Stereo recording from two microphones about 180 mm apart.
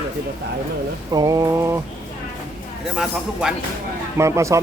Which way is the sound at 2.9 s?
5° right (ahead or behind).